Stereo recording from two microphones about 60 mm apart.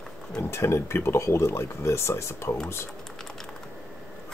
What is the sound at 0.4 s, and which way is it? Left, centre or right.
Speech, left.